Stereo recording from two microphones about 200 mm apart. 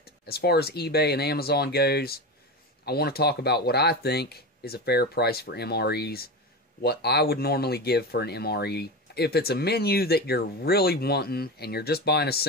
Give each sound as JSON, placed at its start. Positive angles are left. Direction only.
{"t": 0.3, "sound": "speech", "side_deg": 50}